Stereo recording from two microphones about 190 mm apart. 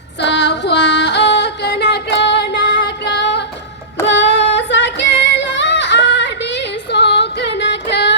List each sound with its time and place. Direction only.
0.2 s female singing: 65° left (ahead or behind)
4.0 s child singing: 70° left (ahead or behind)